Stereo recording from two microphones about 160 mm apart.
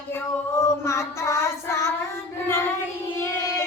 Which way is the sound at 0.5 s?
15° left (ahead or behind).